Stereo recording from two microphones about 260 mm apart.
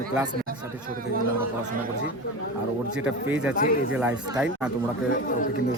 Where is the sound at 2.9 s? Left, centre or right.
Centre.